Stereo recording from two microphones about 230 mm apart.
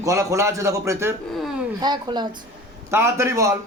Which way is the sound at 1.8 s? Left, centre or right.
Centre.